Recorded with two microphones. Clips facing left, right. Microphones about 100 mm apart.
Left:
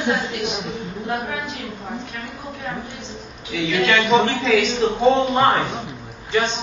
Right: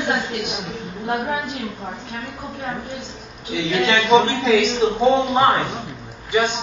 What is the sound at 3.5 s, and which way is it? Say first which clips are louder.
Speech: even; 30° right (ahead or behind).